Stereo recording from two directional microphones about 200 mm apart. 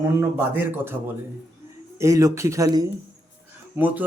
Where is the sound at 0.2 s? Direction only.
10° right (ahead or behind).